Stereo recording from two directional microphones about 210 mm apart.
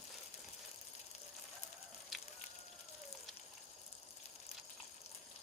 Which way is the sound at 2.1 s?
Centre (ahead or behind).